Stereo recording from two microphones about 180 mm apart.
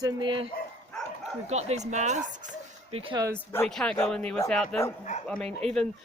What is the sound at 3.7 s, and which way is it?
Speech, centre (ahead or behind).